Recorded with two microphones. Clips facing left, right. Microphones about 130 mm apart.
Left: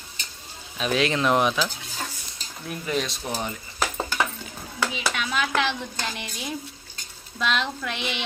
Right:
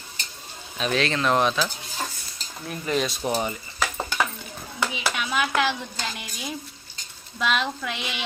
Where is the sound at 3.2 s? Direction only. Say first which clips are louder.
Right 6 dB; 20° right (ahead or behind).